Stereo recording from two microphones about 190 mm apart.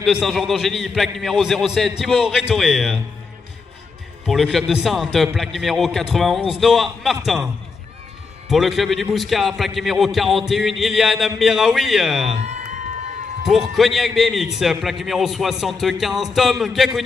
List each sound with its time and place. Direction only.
0.0 s a man's voice: centre (ahead or behind)
4.3 s a man's voice: centre (ahead or behind)
8.5 s a man's voice: centre (ahead or behind)
12.4 s a sound: 35° right (ahead or behind)
13.5 s a man's voice: centre (ahead or behind)